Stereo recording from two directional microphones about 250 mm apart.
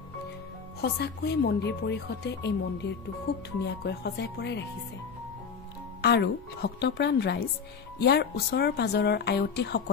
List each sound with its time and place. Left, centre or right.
0.7 s a woman's voice: left
5.9 s a woman's voice: left